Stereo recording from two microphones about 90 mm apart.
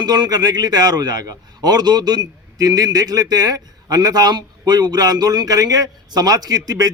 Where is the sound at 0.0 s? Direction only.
50° right (ahead or behind).